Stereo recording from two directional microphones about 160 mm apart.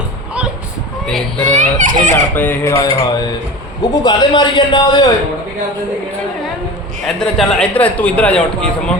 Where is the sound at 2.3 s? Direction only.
10° left (ahead or behind).